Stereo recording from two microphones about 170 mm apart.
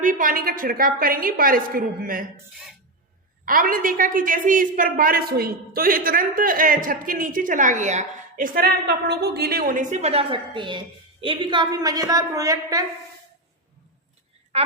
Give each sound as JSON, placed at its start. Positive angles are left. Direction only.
{"t": 0.0, "sound": "a woman's voice", "side_deg": -50}
{"t": 3.4, "sound": "a woman's voice", "side_deg": -55}
{"t": 14.5, "sound": "a woman's voice", "side_deg": -40}